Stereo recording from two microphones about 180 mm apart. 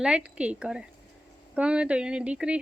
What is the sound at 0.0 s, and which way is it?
A woman's voice, 5° right (ahead or behind).